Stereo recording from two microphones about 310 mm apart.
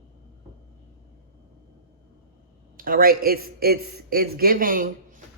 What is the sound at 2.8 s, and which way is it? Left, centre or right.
Speech, right.